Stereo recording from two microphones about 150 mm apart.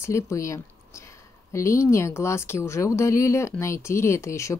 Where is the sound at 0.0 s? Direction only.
20° left (ahead or behind).